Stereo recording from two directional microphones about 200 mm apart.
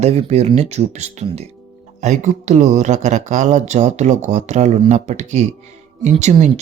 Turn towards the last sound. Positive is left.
turn(degrees=-35)  # may be behind; listen again after turning